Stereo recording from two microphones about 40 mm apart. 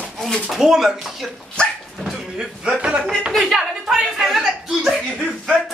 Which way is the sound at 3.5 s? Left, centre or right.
Centre.